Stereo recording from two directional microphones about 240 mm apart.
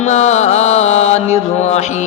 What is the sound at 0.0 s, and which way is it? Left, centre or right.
Mantra, left.